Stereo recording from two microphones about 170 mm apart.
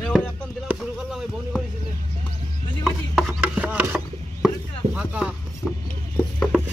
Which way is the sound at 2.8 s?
Centre (ahead or behind).